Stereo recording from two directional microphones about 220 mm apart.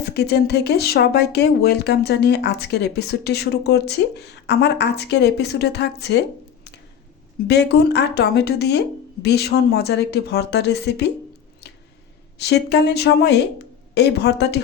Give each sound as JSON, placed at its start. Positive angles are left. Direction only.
{"t": 0.1, "sound": "speech", "side_deg": 50}
{"t": 7.4, "sound": "speech", "side_deg": 50}
{"t": 11.6, "sound": "a sound", "side_deg": 50}
{"t": 12.4, "sound": "speech", "side_deg": 50}